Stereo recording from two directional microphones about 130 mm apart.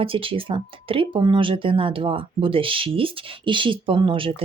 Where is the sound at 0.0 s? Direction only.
45° right (ahead or behind).